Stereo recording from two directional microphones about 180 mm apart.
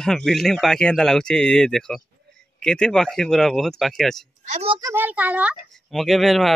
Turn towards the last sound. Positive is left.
turn(degrees=0)  # may be behind; listen again after turning